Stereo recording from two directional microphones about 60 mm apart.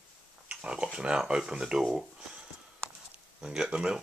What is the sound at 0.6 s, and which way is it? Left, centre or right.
Speech, centre.